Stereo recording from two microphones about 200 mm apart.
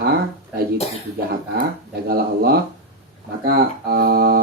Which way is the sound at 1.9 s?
50° right (ahead or behind).